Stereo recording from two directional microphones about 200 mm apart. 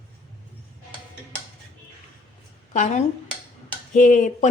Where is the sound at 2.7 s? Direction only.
35° left (ahead or behind).